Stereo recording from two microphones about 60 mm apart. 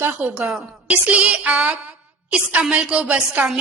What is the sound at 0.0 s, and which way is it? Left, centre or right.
A woman's voice, right.